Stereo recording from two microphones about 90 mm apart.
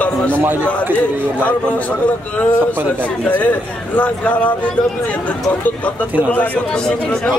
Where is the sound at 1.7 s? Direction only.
15° left (ahead or behind).